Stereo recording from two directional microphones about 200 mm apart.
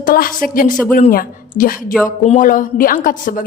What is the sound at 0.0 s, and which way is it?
A woman's voice, 45° left (ahead or behind).